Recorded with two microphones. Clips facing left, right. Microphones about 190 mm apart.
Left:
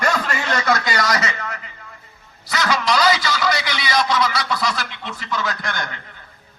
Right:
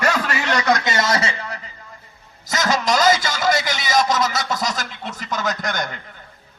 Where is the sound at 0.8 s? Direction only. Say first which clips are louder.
Right 1 dB; 25° right (ahead or behind); by 5.9 s 40° right (ahead or behind).